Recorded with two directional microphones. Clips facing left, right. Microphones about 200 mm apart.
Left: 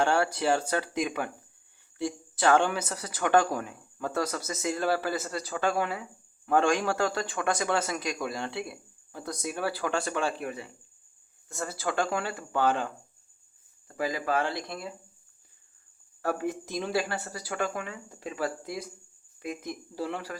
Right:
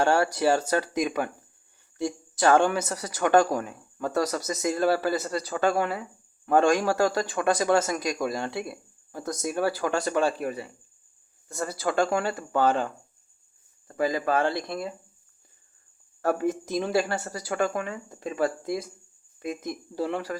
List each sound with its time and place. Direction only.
0.0 s a woman's voice: 40° right (ahead or behind)
16.2 s a woman's voice: 40° right (ahead or behind)